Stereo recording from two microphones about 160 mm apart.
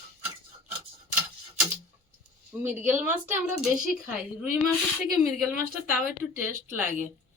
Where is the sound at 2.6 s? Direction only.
10° right (ahead or behind).